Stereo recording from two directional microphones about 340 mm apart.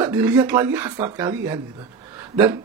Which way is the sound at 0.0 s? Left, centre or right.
Centre.